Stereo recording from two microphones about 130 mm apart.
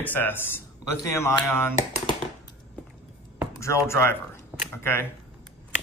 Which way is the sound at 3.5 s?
25° left (ahead or behind).